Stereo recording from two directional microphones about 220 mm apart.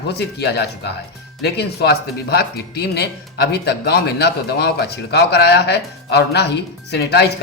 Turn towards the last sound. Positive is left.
turn(degrees=50)  # may be behind; listen again after turning